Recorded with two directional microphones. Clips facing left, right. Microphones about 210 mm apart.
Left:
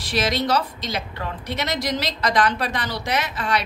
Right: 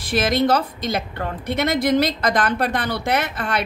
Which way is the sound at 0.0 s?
50° right (ahead or behind).